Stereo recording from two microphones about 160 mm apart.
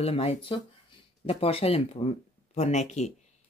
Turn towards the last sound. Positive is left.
turn(degrees=45)  # may be behind; listen again after turning